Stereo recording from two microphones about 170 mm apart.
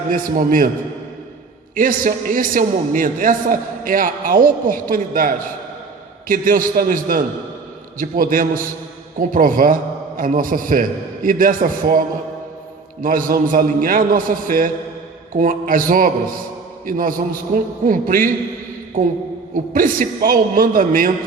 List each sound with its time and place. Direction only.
0.1 s a man's voice: 55° right (ahead or behind)
1.7 s a man's voice: 55° right (ahead or behind)
19.5 s a man's voice: 55° right (ahead or behind)